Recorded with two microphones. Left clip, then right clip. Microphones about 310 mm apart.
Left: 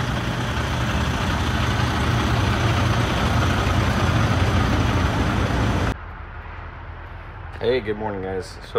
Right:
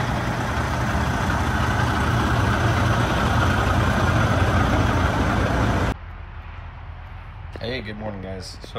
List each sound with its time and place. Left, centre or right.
0.0 s vehicle: centre
1.1 s vehicle: centre
7.6 s a sound: centre